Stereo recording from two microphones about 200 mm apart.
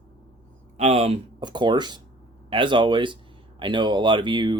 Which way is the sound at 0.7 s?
35° right (ahead or behind).